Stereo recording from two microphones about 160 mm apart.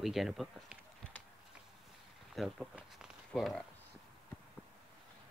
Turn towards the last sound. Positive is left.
turn(degrees=0)  # may be behind; listen again after turning